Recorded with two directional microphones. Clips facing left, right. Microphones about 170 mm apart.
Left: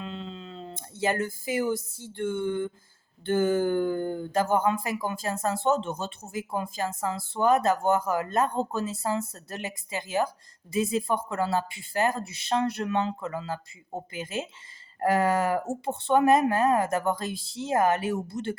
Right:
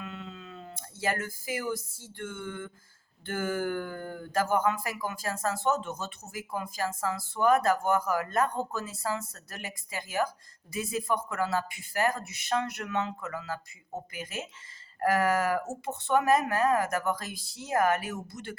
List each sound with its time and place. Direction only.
0.0 s speech: 30° left (ahead or behind)